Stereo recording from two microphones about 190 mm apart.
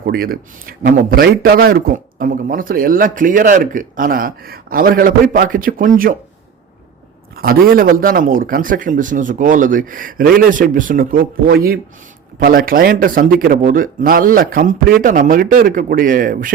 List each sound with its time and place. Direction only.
0.0 s a man's voice: 50° right (ahead or behind)
7.3 s a man's voice: 50° right (ahead or behind)